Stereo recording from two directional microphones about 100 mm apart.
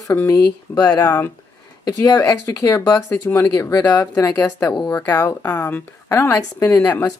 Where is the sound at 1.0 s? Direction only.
20° left (ahead or behind).